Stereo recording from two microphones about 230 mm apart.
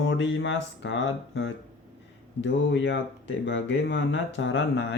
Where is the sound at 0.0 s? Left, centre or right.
Left.